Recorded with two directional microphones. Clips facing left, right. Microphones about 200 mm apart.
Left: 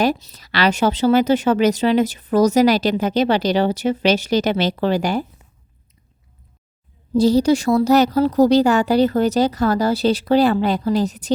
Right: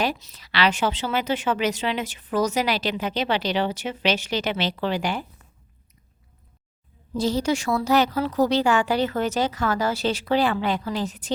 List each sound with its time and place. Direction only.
0.0 s a woman's voice: 40° left (ahead or behind)
7.2 s a woman's voice: 35° left (ahead or behind)